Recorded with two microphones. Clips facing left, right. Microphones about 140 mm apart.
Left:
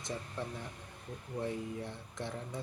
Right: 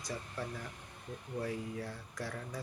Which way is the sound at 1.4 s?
25° left (ahead or behind).